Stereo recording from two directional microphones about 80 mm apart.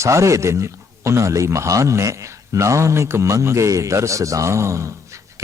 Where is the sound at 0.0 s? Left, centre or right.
Right.